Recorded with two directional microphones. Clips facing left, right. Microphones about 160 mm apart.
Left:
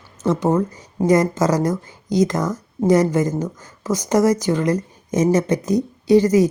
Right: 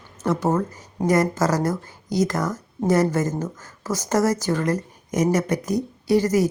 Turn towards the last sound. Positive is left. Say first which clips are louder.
# left 5 dB
turn(degrees=20)  # may be behind; listen again after turning